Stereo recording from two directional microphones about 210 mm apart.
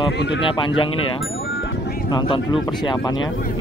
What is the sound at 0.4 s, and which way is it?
Speech, 25° left (ahead or behind).